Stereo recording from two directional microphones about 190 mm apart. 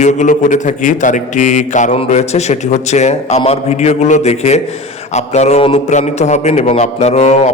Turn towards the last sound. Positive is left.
turn(degrees=35)  # may be behind; listen again after turning